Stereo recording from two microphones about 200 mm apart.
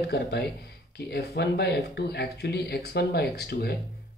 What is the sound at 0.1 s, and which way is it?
Speech, 55° left (ahead or behind).